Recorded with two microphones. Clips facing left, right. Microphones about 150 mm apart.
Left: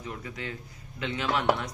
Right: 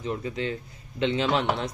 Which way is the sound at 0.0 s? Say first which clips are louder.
Right 8 dB; 25° right (ahead or behind).